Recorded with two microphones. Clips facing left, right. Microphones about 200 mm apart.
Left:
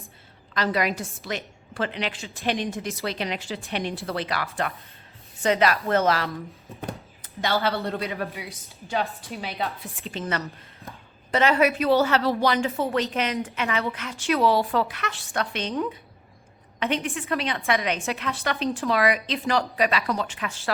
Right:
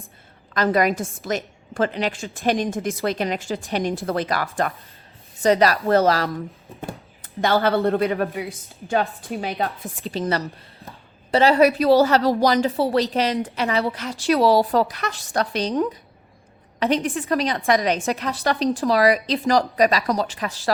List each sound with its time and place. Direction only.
0.5 s a woman's voice: 45° right (ahead or behind)
7.2 s a woman's voice: 50° right (ahead or behind)
10.0 s a woman's voice: 35° right (ahead or behind)